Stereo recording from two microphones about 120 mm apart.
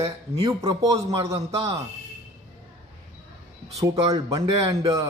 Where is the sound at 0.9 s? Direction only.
60° right (ahead or behind).